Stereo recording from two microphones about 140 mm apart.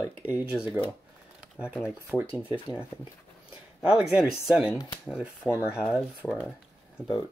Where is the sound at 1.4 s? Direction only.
10° right (ahead or behind).